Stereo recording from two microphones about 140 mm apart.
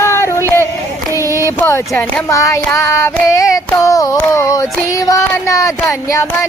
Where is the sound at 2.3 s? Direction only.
20° left (ahead or behind).